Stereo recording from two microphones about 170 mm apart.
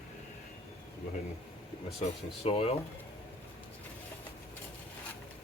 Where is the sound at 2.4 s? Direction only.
35° left (ahead or behind).